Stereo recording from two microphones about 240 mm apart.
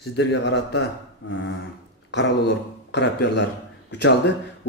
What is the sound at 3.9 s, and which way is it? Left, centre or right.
Speech, left.